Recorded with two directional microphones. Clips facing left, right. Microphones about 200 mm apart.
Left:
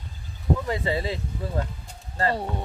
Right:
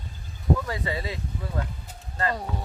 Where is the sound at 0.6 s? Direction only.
25° left (ahead or behind).